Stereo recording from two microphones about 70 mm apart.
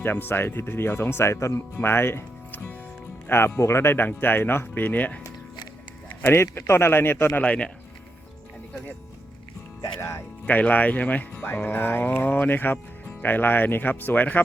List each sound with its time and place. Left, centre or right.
0.0 s speech: left
6.2 s speech: left; by 7.7 s centre
10.4 s speech: left